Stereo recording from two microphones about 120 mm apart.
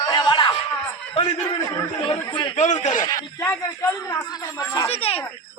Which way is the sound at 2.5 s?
75° left (ahead or behind).